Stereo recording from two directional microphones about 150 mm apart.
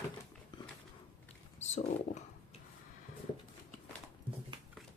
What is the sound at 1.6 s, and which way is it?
Speech, 50° left (ahead or behind).